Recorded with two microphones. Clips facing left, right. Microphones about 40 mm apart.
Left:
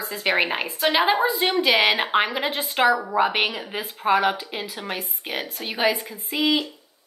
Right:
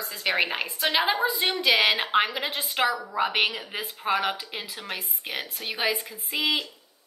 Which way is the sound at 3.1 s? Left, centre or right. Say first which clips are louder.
Left 4 dB; centre.